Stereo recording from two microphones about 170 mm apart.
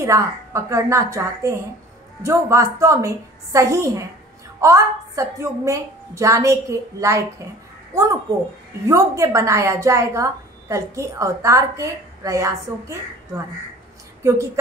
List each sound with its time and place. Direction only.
0.0 s a woman's voice: 15° right (ahead or behind)